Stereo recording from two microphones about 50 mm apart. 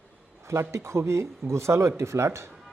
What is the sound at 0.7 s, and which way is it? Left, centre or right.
Speech, right.